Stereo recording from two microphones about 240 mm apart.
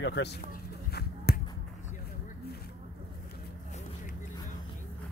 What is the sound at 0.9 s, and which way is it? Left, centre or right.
Finger snapping, left.